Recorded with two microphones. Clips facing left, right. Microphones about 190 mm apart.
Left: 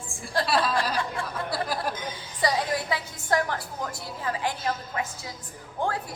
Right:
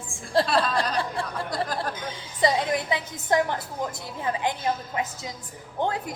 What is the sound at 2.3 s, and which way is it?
A woman's voice, 20° right (ahead or behind).